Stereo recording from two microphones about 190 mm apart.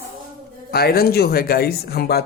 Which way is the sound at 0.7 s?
55° left (ahead or behind).